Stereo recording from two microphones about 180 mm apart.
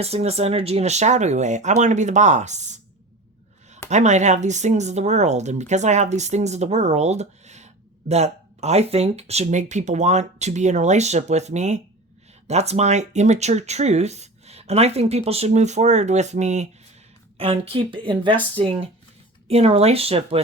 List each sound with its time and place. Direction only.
0.0 s speech: 35° right (ahead or behind)
3.8 s a woman's voice: 40° right (ahead or behind)